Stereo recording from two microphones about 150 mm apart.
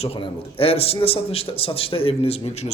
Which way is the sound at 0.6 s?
40° left (ahead or behind).